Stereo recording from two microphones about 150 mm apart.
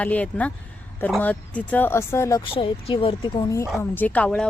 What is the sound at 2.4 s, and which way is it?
Speech, 35° left (ahead or behind).